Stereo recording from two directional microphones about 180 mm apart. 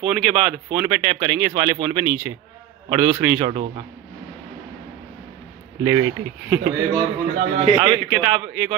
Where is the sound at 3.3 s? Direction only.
40° right (ahead or behind).